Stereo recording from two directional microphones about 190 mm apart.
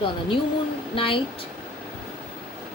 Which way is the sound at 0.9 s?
30° left (ahead or behind).